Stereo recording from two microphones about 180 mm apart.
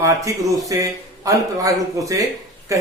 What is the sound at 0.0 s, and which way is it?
Speech, 20° right (ahead or behind).